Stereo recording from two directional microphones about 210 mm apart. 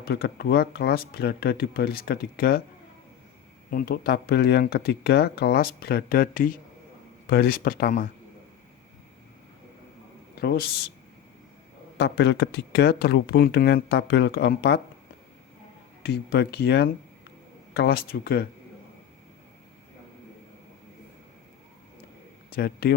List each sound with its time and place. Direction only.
0.0 s speech: 50° left (ahead or behind)
3.7 s speech: 45° left (ahead or behind)
10.3 s speech: 45° left (ahead or behind)
11.9 s speech: 55° left (ahead or behind)
16.0 s speech: 55° left (ahead or behind)
22.5 s speech: 45° left (ahead or behind)